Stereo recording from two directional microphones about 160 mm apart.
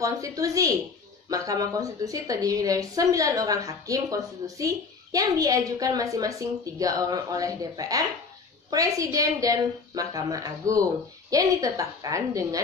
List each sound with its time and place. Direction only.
0.0 s a woman's voice: 20° right (ahead or behind)